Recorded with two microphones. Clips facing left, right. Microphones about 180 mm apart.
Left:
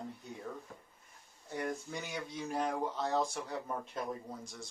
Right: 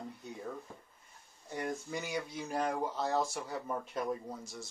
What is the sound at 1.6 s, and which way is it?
Speech, 5° right (ahead or behind).